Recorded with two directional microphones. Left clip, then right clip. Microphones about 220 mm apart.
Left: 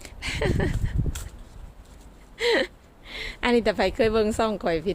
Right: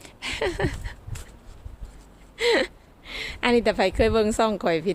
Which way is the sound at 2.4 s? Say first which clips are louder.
Right 1 dB; 10° right (ahead or behind).